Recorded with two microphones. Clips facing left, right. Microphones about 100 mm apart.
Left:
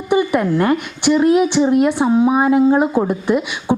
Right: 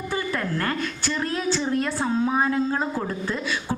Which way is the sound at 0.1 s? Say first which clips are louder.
Left 13 dB; 20° left (ahead or behind).